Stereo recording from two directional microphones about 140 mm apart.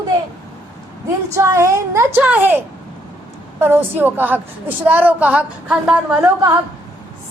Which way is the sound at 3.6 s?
15° right (ahead or behind).